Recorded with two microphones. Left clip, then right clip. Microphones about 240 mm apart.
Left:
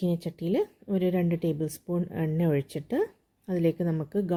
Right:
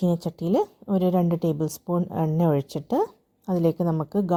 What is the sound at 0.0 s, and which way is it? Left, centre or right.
Speech, right.